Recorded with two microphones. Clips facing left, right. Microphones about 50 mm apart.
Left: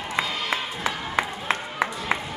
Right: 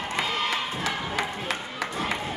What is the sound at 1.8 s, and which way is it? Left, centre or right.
Music, left.